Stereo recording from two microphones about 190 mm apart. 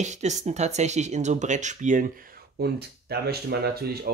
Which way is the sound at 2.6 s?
55° right (ahead or behind).